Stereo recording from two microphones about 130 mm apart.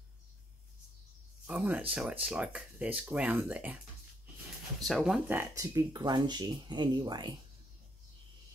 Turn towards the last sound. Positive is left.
turn(degrees=-35)  # may be behind; listen again after turning